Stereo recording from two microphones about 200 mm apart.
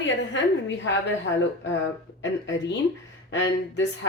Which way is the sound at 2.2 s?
60° left (ahead or behind).